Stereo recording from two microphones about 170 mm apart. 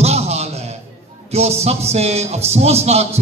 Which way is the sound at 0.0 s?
40° right (ahead or behind).